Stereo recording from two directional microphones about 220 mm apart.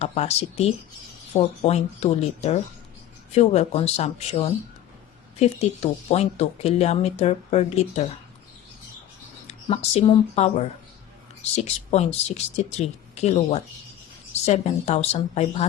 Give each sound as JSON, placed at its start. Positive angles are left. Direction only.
{"t": 0.0, "sound": "speech", "side_deg": 30}
{"t": 9.5, "sound": "speech", "side_deg": 25}